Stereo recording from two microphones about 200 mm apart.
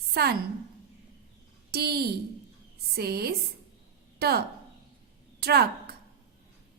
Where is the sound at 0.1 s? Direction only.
50° right (ahead or behind).